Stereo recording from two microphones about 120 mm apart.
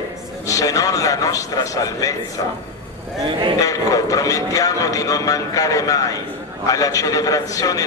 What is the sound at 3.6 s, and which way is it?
A man's voice, 30° left (ahead or behind).